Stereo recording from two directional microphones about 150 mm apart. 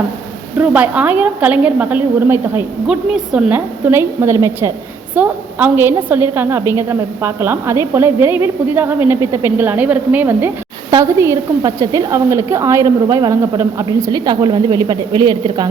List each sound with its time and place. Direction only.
0.6 s a woman's voice: 10° right (ahead or behind); by 15.6 s 30° right (ahead or behind)